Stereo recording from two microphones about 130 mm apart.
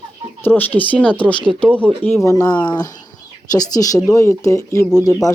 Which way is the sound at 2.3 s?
30° left (ahead or behind).